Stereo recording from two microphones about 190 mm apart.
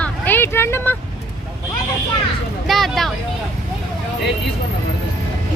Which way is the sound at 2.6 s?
Centre (ahead or behind).